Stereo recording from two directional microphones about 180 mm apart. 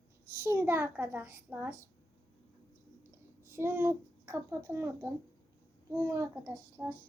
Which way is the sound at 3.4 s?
15° right (ahead or behind).